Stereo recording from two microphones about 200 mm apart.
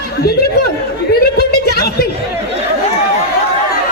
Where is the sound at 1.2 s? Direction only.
50° left (ahead or behind).